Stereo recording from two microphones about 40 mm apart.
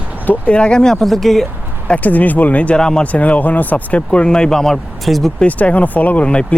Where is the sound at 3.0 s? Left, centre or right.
Left.